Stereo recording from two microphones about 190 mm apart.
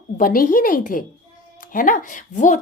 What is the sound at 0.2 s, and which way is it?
A woman's voice, 45° left (ahead or behind).